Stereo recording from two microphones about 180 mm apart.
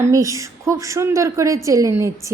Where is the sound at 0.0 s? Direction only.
15° right (ahead or behind).